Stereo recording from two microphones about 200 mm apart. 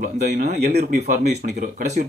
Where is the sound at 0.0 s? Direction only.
40° right (ahead or behind).